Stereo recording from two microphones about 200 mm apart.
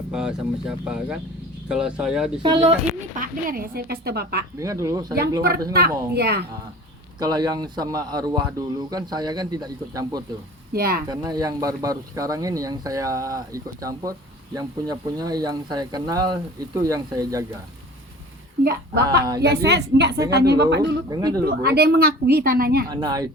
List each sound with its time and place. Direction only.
0.1 s speech: 5° right (ahead or behind)
2.4 s speech: 25° right (ahead or behind)
3.2 s speech: 50° right (ahead or behind)
4.6 s speech: 15° right (ahead or behind)
5.7 s speech: 50° right (ahead or behind)
7.2 s speech: 20° right (ahead or behind)
10.7 s speech: 50° right (ahead or behind)
11.1 s speech: 20° right (ahead or behind)
18.6 s a woman's voice: 55° right (ahead or behind)
21.1 s speech: 20° right (ahead or behind)
21.4 s speech: 50° right (ahead or behind)
23.0 s speech: 20° right (ahead or behind)